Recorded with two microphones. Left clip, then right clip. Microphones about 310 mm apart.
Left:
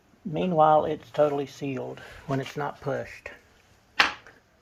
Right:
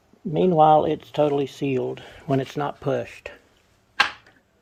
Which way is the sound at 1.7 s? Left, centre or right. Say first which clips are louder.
Right 8 dB; right.